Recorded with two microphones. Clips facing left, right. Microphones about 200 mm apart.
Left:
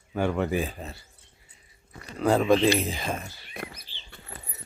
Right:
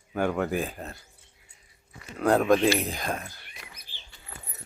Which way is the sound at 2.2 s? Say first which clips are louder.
Even; centre (ahead or behind).